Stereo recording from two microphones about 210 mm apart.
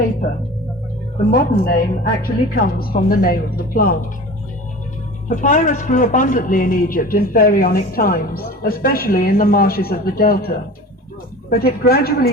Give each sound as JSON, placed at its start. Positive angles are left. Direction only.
{"t": 1.3, "sound": "a woman's voice", "side_deg": 45}
{"t": 5.3, "sound": "a man's voice", "side_deg": 35}